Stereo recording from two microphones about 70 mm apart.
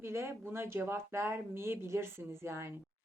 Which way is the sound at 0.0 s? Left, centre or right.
Right.